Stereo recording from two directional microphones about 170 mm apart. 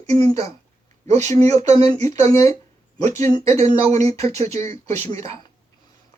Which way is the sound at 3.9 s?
40° right (ahead or behind).